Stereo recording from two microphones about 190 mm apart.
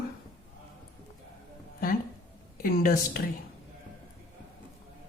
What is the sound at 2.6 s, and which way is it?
Speech, 50° left (ahead or behind).